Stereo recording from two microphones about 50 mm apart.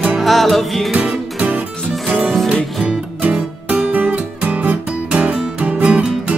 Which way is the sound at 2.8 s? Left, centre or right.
Right.